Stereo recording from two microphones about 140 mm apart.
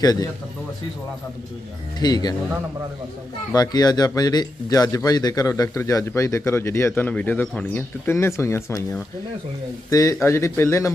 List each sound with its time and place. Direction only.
0.0 s speech: 25° left (ahead or behind)
2.0 s speech: 30° left (ahead or behind)
3.5 s speech: 30° left (ahead or behind)